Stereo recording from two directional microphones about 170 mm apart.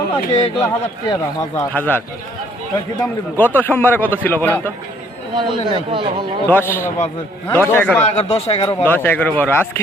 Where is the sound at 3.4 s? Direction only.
10° left (ahead or behind).